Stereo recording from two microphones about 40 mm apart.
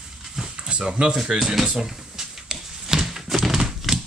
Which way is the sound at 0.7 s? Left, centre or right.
Right.